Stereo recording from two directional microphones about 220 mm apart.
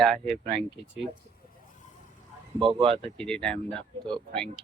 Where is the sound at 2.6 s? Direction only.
25° right (ahead or behind).